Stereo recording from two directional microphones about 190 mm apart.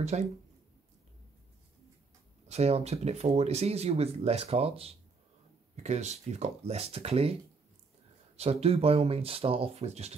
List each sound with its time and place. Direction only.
0.0 s speech: 35° right (ahead or behind)
2.4 s speech: 35° right (ahead or behind)
8.4 s speech: 35° right (ahead or behind)